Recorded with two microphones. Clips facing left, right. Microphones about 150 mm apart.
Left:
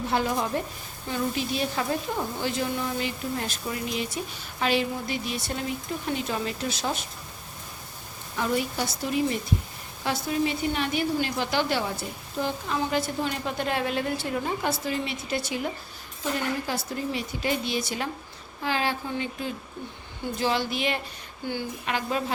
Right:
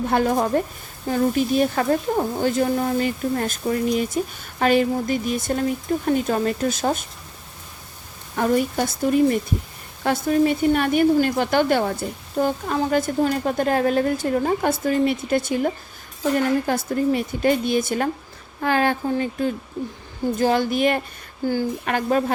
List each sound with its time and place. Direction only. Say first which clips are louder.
0.1 s a woman's voice: right 7 dB; 50° right (ahead or behind)
8.4 s a woman's voice: right 7 dB; 50° right (ahead or behind)